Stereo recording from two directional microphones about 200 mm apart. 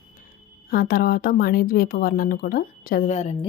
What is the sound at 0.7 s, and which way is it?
Speech, 50° left (ahead or behind).